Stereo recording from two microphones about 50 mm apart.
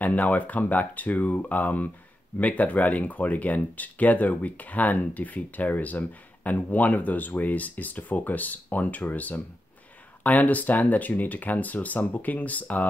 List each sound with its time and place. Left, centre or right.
0.0 s speech: left